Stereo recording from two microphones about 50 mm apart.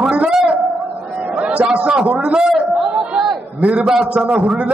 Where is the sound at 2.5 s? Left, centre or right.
Centre.